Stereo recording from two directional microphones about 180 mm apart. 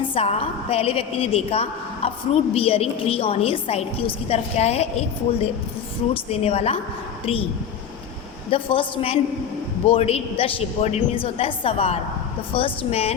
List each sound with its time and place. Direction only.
0.1 s a woman's voice: 35° left (ahead or behind)
8.4 s a woman's voice: 30° left (ahead or behind)